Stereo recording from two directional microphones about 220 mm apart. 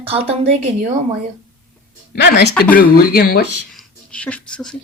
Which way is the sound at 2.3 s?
45° left (ahead or behind).